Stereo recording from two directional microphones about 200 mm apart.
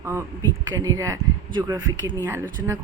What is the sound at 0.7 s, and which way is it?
A woman's voice, 15° right (ahead or behind).